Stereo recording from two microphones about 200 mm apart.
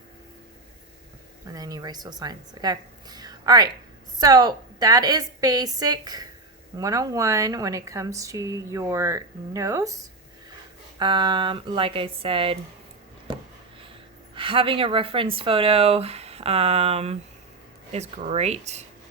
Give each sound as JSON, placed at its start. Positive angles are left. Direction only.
{"t": 1.5, "sound": "a woman's voice", "side_deg": -20}
{"t": 11.0, "sound": "speech", "side_deg": -25}
{"t": 14.3, "sound": "speech", "side_deg": -25}